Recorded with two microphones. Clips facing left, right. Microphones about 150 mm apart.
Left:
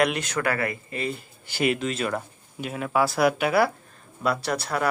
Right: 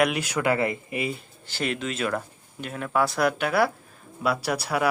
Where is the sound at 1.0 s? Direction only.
5° right (ahead or behind).